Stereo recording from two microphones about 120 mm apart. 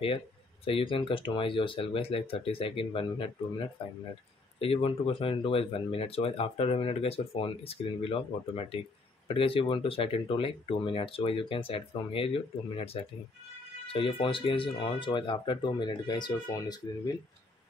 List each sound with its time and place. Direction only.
0.7 s speech: 50° left (ahead or behind); by 17.2 s 35° left (ahead or behind)